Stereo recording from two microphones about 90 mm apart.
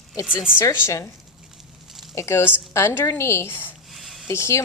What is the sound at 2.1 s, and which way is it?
A woman's voice, 30° left (ahead or behind).